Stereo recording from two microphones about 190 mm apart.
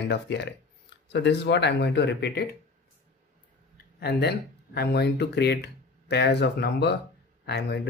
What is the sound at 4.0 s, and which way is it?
Speech, 60° left (ahead or behind).